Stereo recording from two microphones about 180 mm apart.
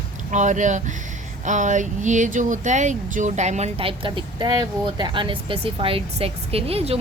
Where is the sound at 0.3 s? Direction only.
45° right (ahead or behind).